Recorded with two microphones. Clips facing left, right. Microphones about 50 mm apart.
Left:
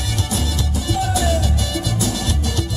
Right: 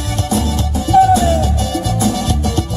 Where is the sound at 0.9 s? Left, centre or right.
Right.